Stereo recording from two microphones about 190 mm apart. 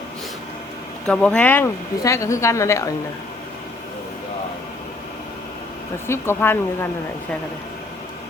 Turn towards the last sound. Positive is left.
turn(degrees=10)  # may be behind; listen again after turning